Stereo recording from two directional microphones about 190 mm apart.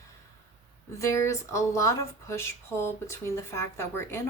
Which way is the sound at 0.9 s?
15° left (ahead or behind).